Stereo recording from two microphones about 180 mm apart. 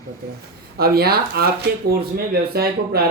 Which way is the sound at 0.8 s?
60° right (ahead or behind).